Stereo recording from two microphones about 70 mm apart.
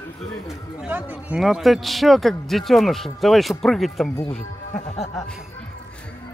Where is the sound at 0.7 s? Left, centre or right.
Right.